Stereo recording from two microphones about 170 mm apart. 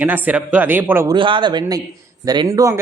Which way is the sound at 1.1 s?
30° right (ahead or behind).